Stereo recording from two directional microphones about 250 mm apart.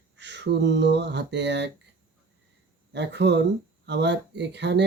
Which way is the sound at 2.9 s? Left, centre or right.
Right.